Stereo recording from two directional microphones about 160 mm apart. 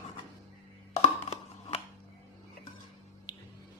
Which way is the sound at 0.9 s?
40° left (ahead or behind).